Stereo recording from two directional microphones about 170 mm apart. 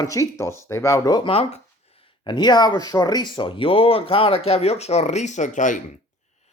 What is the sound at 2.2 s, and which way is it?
Speech, 25° left (ahead or behind).